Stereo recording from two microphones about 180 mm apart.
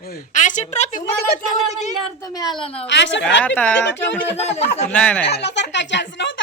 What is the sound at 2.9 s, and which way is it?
Speech, 75° left (ahead or behind).